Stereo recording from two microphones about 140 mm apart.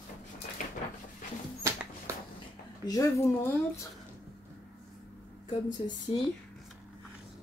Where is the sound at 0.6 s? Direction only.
65° left (ahead or behind).